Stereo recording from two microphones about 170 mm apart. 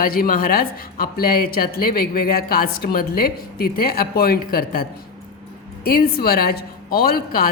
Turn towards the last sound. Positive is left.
turn(degrees=60)  # may be behind; listen again after turning